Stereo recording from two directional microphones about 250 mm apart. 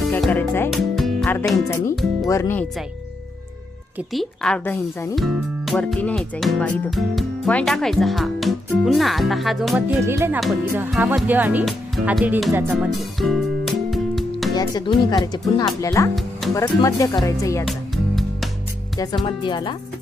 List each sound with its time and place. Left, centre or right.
0.0 s speech: centre
3.9 s speech: centre
14.5 s speech: centre
17.7 s music: centre
18.9 s speech: centre